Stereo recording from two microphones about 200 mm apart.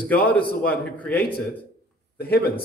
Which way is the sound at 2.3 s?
50° left (ahead or behind).